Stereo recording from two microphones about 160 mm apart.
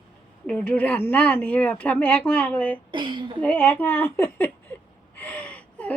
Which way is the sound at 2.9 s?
30° right (ahead or behind).